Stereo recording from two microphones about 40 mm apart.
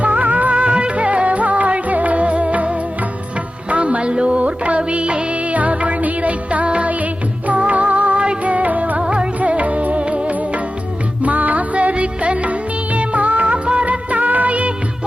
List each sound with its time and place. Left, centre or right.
0.0 s music: right
9.0 s music: right
9.4 s music: right
13.8 s music of bollywood: right